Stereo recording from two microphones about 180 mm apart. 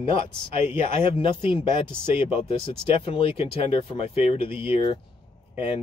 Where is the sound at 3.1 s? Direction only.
30° left (ahead or behind).